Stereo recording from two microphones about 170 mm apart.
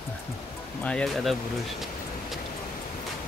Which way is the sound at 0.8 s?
5° left (ahead or behind).